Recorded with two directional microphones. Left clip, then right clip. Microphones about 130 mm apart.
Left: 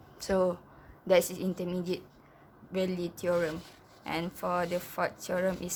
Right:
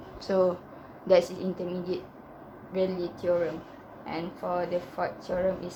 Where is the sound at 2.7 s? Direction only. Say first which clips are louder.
Right 4 dB; 70° left (ahead or behind).